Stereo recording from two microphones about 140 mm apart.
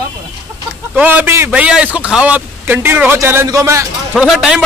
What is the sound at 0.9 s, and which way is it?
A man's voice, 10° right (ahead or behind).